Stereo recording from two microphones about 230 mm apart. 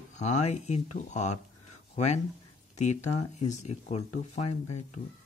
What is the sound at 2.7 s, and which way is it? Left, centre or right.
Speech, left.